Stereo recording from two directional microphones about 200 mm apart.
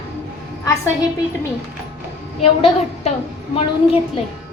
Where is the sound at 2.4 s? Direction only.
30° left (ahead or behind).